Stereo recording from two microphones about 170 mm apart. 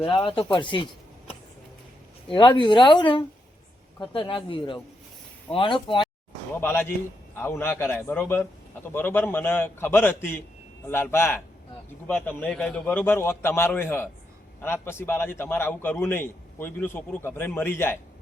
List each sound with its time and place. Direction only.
0.4 s speech: 30° left (ahead or behind)
2.3 s speech: 30° left (ahead or behind)
6.5 s a man's voice: 10° left (ahead or behind)